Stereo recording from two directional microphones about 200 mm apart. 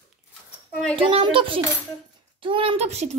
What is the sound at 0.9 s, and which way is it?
A woman's voice, 25° right (ahead or behind).